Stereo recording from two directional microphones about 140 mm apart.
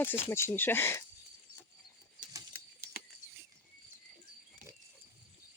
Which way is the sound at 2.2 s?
70° right (ahead or behind).